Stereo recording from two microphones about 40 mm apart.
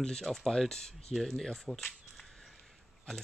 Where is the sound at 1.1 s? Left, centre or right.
Centre.